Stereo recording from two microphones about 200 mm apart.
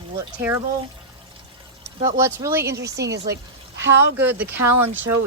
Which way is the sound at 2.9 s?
55° right (ahead or behind).